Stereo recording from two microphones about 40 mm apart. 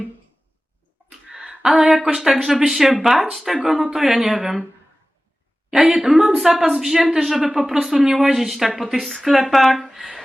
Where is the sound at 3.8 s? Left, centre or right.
Centre.